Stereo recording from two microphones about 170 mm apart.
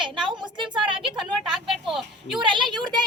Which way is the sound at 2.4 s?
30° right (ahead or behind).